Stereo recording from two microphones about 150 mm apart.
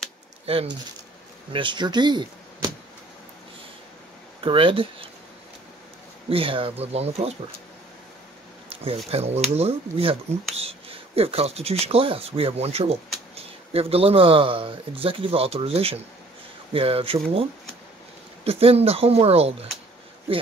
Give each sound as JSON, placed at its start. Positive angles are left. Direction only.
{"t": 1.5, "sound": "speech", "side_deg": -30}
{"t": 4.4, "sound": "speech", "side_deg": -35}
{"t": 6.2, "sound": "speech", "side_deg": -35}
{"t": 8.6, "sound": "speech", "side_deg": -40}